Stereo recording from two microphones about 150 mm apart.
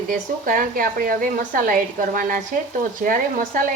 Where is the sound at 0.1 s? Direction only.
65° right (ahead or behind).